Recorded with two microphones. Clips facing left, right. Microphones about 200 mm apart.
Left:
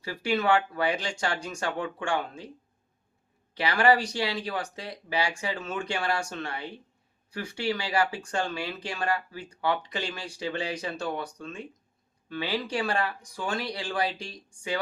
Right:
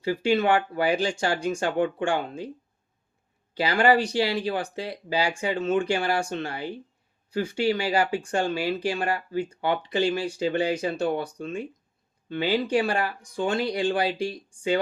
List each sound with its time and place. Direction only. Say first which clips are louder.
0.0 s speech: right 5 dB; 25° right (ahead or behind)
3.6 s speech: right 2 dB; 30° right (ahead or behind)